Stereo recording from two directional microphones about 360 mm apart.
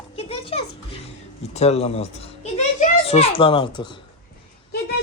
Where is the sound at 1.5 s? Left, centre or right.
Centre.